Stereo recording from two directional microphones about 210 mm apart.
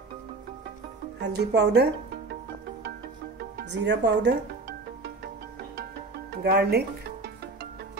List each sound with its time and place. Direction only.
1.2 s speech: 50° right (ahead or behind)
3.6 s music: 55° right (ahead or behind)
6.4 s speech: 50° right (ahead or behind)